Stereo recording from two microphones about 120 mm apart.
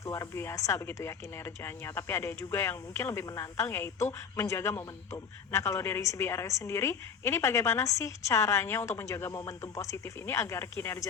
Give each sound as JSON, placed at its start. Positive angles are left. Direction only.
{"t": 0.0, "sound": "speech", "side_deg": 25}